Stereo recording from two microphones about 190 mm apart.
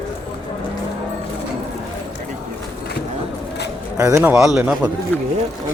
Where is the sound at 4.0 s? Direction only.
15° right (ahead or behind).